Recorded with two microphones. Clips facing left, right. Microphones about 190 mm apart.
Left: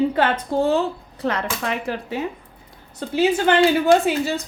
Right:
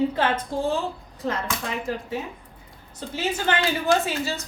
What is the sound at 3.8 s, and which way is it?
Speech, 55° left (ahead or behind).